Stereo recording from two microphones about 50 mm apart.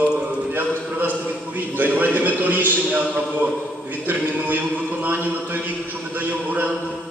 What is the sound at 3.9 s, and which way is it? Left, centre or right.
A capella, right.